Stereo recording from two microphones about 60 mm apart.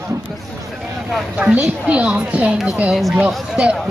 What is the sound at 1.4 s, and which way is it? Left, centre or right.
Speech, right.